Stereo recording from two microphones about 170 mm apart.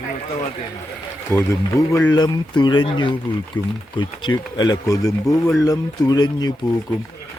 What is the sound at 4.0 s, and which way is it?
Speech, 25° left (ahead or behind).